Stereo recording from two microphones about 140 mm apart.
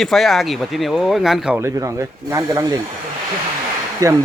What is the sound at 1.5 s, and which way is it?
Speech, 20° right (ahead or behind).